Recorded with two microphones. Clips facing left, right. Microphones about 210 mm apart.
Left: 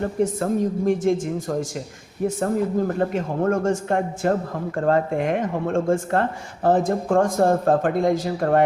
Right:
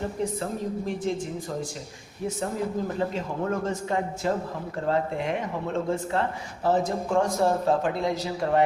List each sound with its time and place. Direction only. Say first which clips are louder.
0.0 s speech: left 7 dB; 50° left (ahead or behind)
2.4 s a man's voice: left 7 dB; 55° left (ahead or behind)